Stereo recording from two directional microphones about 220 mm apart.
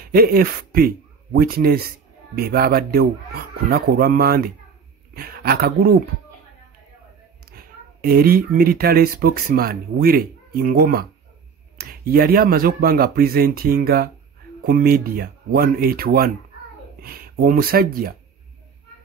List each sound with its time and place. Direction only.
0.0 s speech: 45° right (ahead or behind)
7.5 s speech: 40° right (ahead or behind)